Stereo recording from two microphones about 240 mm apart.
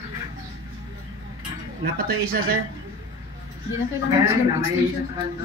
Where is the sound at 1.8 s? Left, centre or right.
Right.